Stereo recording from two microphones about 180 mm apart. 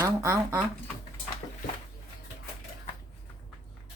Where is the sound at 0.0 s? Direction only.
15° right (ahead or behind).